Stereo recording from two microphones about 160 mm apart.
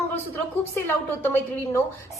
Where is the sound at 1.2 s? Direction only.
15° left (ahead or behind).